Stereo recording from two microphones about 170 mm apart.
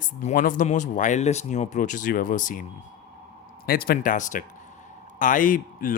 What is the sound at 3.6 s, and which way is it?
Speech, 60° left (ahead or behind).